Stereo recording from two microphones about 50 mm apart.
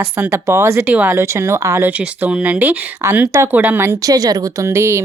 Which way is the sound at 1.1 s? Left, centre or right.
Right.